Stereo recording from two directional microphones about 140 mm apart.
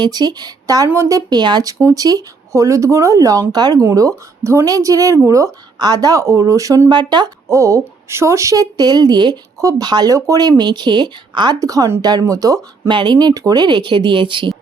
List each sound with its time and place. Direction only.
0.0 s speech: 30° right (ahead or behind)
7.5 s speech: 20° right (ahead or behind)